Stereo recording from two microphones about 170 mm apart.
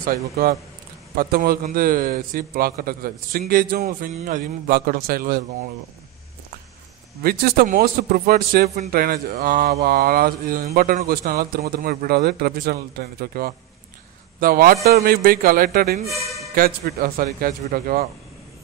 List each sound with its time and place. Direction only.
0.0 s a man's voice: 60° right (ahead or behind)
4.1 s a man's voice: 50° right (ahead or behind)
7.2 s a man's voice: 65° right (ahead or behind)